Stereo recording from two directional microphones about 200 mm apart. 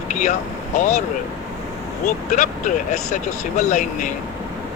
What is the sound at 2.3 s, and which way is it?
Speech, 35° left (ahead or behind).